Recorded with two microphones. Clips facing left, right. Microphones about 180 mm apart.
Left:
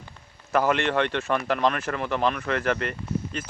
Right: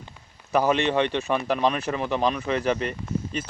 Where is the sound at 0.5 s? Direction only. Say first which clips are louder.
Right 1 dB; 15° right (ahead or behind).